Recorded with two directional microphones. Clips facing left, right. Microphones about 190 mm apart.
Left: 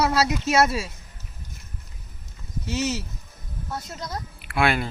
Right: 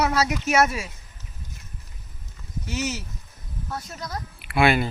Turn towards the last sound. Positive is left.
turn(degrees=-5)  # may be behind; listen again after turning